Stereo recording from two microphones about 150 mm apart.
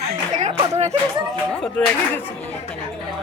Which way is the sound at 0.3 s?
50° right (ahead or behind).